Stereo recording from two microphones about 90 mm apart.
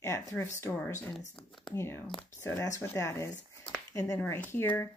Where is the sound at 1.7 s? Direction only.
30° left (ahead or behind).